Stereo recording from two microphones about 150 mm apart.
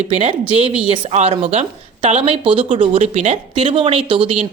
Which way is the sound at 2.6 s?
50° right (ahead or behind).